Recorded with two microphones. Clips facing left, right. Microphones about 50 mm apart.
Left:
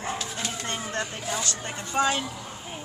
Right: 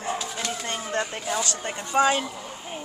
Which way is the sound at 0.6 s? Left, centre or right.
Centre.